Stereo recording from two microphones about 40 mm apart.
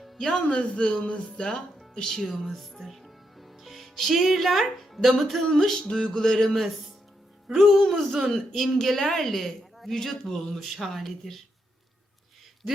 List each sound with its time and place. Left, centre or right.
0.0 s music: centre
0.4 s a man's voice: left
2.0 s speech: centre
5.1 s music: centre
5.8 s music: centre
7.5 s a woman's voice: centre